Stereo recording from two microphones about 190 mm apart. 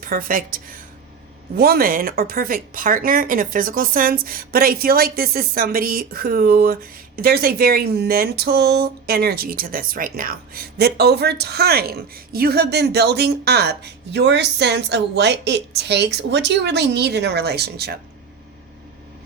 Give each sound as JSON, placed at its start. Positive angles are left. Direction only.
{"t": 0.0, "sound": "speech", "side_deg": -50}